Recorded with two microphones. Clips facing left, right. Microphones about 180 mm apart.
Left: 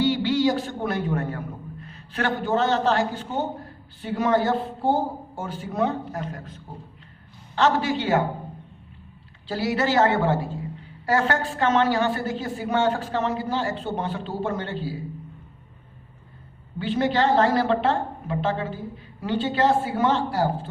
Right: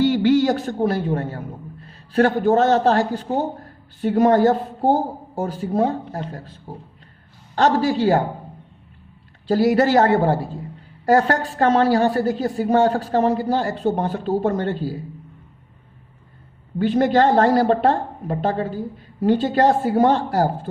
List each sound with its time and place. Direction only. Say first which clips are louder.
0.0 s a sound: right 5 dB; 50° right (ahead or behind); by 1.4 s 30° right (ahead or behind)
1.8 s a man's voice: right 10 dB; 35° right (ahead or behind)
9.5 s a woman's voice: right 8 dB; 40° right (ahead or behind)
16.7 s a woman's voice: right 6 dB; 45° right (ahead or behind)